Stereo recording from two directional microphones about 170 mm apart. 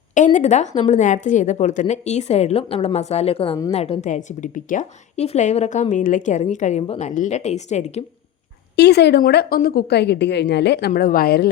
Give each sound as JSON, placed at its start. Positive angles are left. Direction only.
{"t": 0.3, "sound": "a woman's voice", "side_deg": 45}
{"t": 8.7, "sound": "a woman's voice", "side_deg": 80}